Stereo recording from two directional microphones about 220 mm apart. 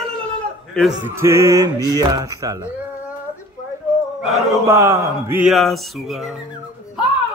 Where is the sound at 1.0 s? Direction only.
10° right (ahead or behind).